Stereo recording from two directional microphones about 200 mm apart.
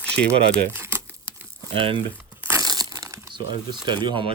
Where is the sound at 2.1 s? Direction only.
10° right (ahead or behind).